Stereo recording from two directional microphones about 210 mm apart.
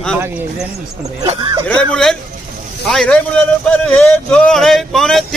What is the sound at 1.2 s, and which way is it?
Speech, 25° right (ahead or behind).